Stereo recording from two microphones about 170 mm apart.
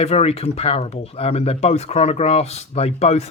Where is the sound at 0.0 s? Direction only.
40° left (ahead or behind).